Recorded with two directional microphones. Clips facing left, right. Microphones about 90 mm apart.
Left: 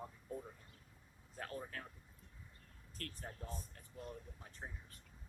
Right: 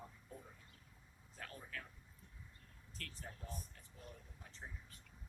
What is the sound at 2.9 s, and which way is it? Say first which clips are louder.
Speech: left 4 dB; 45° left (ahead or behind).